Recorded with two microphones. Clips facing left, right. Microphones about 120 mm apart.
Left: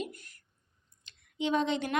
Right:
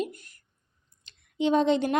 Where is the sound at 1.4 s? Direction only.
30° right (ahead or behind).